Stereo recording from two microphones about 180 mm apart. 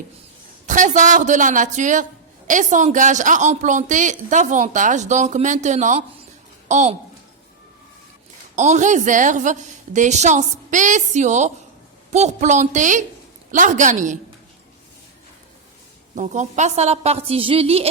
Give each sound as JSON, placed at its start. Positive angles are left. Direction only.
{"t": 0.7, "sound": "a woman's voice", "side_deg": -45}
{"t": 8.5, "sound": "a woman's voice", "side_deg": -40}
{"t": 16.1, "sound": "a woman's voice", "side_deg": -40}